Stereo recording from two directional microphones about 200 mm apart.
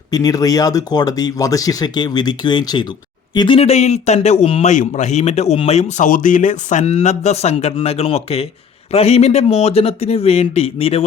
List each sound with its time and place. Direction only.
0.1 s speech: 20° left (ahead or behind)